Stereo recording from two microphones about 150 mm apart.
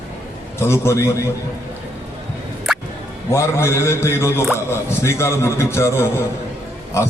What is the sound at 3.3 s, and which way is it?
A man's voice, 20° left (ahead or behind).